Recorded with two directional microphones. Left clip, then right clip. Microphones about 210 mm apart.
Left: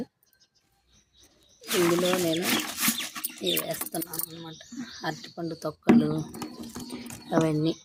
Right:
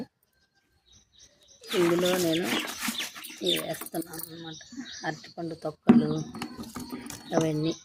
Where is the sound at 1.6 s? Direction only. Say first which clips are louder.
Left 1 dB; 45° left (ahead or behind).